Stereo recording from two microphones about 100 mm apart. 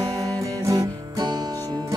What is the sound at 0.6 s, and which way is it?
Music, 35° right (ahead or behind).